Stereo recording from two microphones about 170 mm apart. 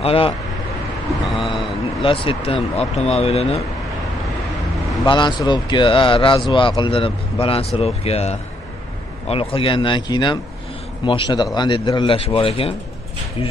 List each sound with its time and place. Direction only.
0.0 s speech: 35° left (ahead or behind)
2.0 s speech: 30° left (ahead or behind)
5.0 s speech: 25° left (ahead or behind)